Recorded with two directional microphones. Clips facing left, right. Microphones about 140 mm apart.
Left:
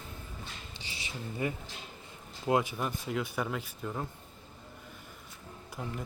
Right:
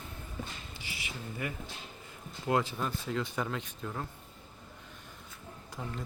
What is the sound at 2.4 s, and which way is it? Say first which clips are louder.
Speech: left 1 dB; 15° left (ahead or behind).